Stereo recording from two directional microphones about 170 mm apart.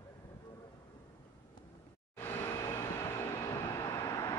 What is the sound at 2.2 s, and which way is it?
Vehicle, 15° left (ahead or behind).